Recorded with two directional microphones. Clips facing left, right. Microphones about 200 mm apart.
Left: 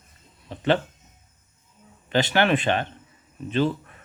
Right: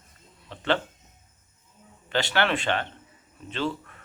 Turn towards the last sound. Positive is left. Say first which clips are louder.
# left 6 dB
turn(degrees=15)  # may be behind; listen again after turning